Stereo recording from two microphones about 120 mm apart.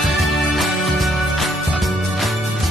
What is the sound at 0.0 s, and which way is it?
Music, centre (ahead or behind).